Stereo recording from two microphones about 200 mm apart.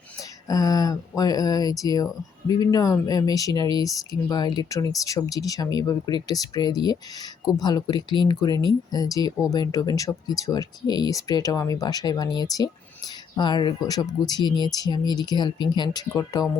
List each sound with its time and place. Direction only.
0.4 s speech: 20° left (ahead or behind)